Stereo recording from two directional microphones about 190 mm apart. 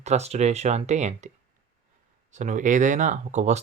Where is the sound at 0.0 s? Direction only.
35° right (ahead or behind).